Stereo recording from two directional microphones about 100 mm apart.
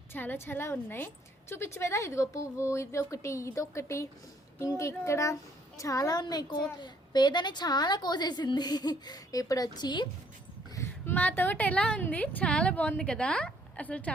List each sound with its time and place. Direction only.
0.1 s a woman's voice: 20° left (ahead or behind); by 10.1 s 45° left (ahead or behind)
10.8 s a woman's voice: 20° left (ahead or behind)